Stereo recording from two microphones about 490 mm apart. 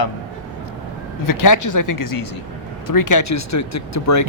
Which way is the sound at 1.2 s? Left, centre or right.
Left.